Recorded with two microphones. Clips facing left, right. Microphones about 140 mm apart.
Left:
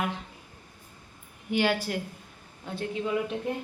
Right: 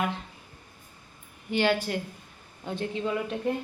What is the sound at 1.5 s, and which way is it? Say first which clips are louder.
A woman's voice: right 1 dB; 10° left (ahead or behind).